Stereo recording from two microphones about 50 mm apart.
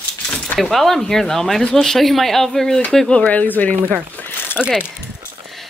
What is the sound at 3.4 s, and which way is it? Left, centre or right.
Speech, left.